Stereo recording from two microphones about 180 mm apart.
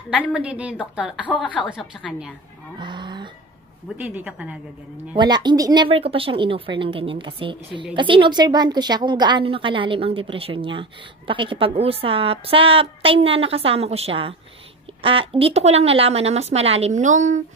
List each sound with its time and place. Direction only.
0.2 s a woman's voice: 5° right (ahead or behind)
1.2 s a woman's voice: 5° left (ahead or behind)
2.8 s a sound: 25° right (ahead or behind)
4.0 s a woman's voice: 10° right (ahead or behind)
5.1 s a woman's voice: 25° right (ahead or behind); by 17.4 s 40° right (ahead or behind)